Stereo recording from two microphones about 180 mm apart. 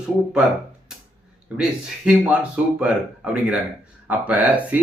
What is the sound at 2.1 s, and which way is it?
Speech, 5° right (ahead or behind).